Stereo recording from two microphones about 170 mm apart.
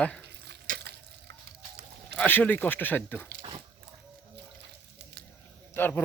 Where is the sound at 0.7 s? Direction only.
55° right (ahead or behind).